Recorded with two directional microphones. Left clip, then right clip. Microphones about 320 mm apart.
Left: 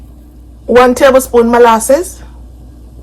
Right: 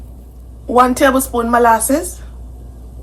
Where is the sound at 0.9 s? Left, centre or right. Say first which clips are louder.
Left 7 dB; centre.